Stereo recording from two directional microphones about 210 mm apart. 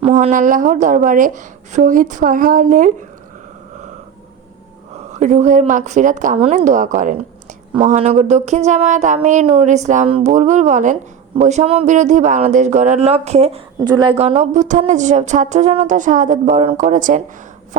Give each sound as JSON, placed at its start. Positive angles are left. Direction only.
{"t": 0.0, "sound": "speech", "side_deg": -35}
{"t": 5.1, "sound": "speech", "side_deg": -35}